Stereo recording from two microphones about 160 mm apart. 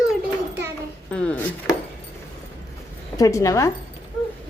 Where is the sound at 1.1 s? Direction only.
10° left (ahead or behind).